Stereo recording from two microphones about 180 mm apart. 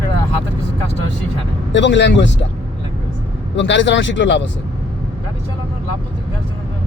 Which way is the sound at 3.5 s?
90° left.